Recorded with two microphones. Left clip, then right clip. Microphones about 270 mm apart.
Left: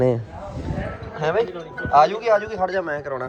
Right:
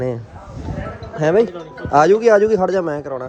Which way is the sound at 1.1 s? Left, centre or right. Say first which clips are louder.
Right 6 dB; right.